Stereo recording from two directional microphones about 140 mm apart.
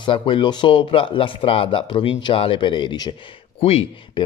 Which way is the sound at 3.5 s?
45° left (ahead or behind).